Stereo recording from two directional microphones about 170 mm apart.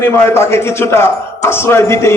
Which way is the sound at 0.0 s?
15° left (ahead or behind).